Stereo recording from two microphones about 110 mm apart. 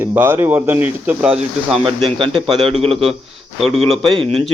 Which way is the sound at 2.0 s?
55° right (ahead or behind).